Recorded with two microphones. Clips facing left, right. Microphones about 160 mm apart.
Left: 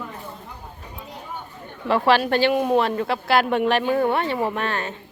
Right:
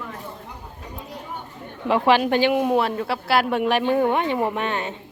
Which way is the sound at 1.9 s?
15° right (ahead or behind).